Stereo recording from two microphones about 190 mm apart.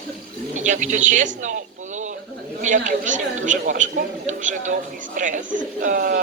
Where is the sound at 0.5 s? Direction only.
40° right (ahead or behind).